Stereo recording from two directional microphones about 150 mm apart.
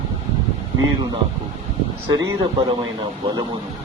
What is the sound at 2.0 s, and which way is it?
Speech, 25° right (ahead or behind).